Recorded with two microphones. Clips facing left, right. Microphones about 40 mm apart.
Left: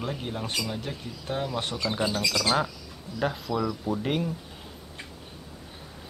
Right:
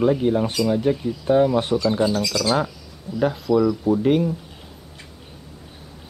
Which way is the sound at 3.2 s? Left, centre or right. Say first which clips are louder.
Right 9 dB; centre.